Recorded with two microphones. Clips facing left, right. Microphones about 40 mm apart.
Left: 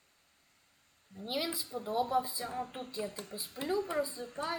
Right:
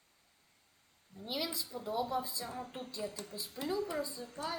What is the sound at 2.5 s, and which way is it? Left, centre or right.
A child's voice, left.